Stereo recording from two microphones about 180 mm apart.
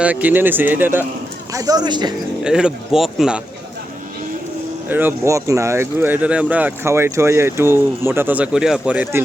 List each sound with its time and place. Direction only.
0.0 s speech: 10° right (ahead or behind); by 2.1 s 25° right (ahead or behind)
2.4 s speech: 5° right (ahead or behind)
4.9 s speech: 10° right (ahead or behind)